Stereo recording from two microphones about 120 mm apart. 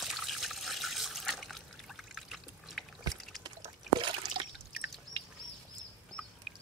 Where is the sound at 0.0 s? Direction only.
Centre (ahead or behind).